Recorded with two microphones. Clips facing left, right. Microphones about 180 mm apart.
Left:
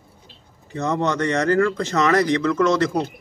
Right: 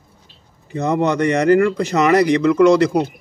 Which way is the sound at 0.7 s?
15° right (ahead or behind).